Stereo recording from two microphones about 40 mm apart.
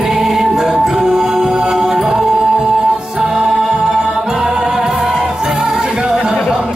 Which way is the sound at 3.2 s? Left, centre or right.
Right.